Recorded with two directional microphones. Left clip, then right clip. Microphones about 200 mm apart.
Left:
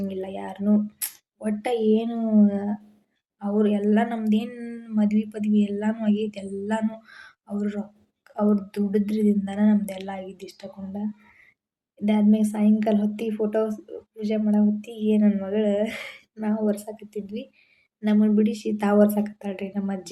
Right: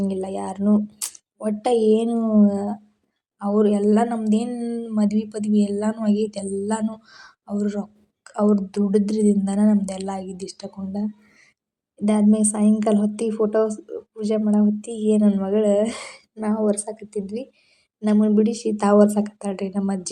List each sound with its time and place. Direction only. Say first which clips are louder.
0.1 s a woman's voice: right 5 dB; 20° right (ahead or behind)
12.0 s a woman's voice: right 3 dB; 20° right (ahead or behind)